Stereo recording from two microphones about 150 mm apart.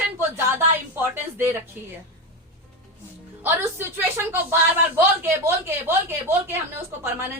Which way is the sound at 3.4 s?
15° right (ahead or behind).